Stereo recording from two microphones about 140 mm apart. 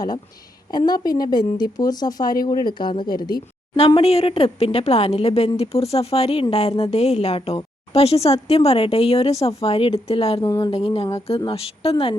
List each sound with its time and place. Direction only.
0.7 s speech: 30° left (ahead or behind)
3.8 s a woman's voice: 45° left (ahead or behind)
10.4 s speech: 20° left (ahead or behind)
10.7 s a woman's voice: 45° left (ahead or behind)